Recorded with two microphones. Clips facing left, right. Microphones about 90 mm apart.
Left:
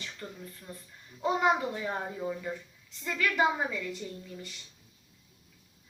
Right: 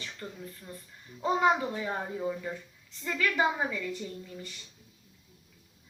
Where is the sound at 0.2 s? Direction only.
20° right (ahead or behind).